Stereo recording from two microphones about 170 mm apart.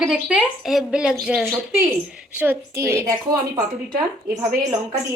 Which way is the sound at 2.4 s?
15° right (ahead or behind).